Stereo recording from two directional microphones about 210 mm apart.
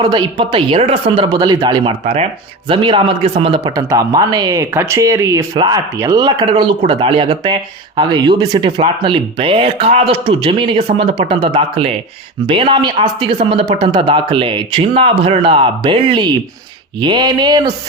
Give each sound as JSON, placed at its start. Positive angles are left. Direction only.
{"t": 0.0, "sound": "speech", "side_deg": -20}